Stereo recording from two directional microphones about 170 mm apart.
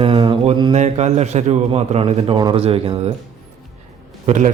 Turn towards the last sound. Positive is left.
turn(degrees=-45)  # may be behind; listen again after turning